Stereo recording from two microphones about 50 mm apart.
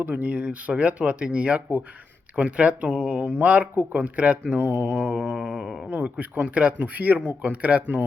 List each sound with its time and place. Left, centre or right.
0.0 s speech: right
2.9 s speech: right
4.5 s speech: right
5.1 s speech: right
5.9 s speech: right